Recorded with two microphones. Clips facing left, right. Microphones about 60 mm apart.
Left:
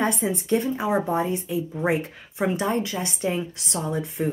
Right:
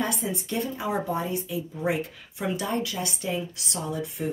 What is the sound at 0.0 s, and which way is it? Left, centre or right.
Speech, left.